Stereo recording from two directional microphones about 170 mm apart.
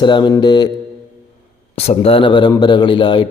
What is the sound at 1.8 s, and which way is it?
Speech, 35° left (ahead or behind).